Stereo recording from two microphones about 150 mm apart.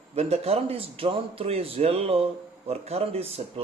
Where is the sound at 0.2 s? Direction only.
40° right (ahead or behind).